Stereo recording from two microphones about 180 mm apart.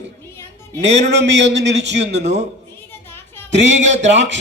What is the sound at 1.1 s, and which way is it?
Speech, 75° right (ahead or behind).